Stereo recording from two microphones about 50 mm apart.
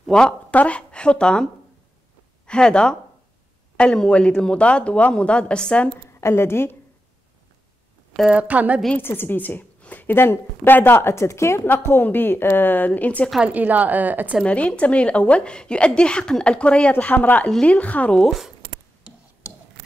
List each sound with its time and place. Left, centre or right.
0.5 s a woman's voice: left
6.2 s speech: left
8.3 s a woman's voice: right
9.0 s speech: left
9.8 s a sound: left
10.1 s speech: left
12.0 s speech: left
13.5 s a woman's voice: right
14.4 s a woman's voice: left
17.0 s speech: left